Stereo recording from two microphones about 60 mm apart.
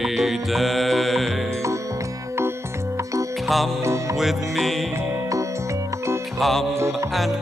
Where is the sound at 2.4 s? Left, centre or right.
Right.